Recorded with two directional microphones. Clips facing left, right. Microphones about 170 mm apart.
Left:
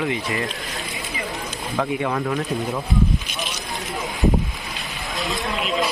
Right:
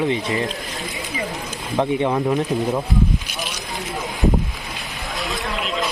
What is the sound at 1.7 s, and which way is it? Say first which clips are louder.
Speech: right 4 dB; 20° right (ahead or behind).